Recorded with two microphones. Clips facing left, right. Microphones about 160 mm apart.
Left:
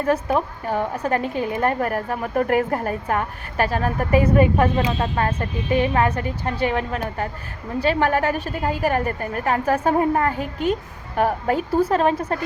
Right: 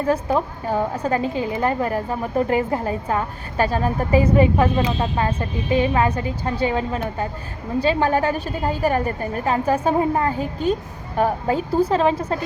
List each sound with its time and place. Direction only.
0.0 s a woman's voice: 30° right (ahead or behind)